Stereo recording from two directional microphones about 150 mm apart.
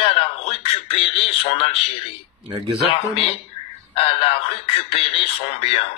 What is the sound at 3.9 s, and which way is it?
A man's voice, 40° left (ahead or behind).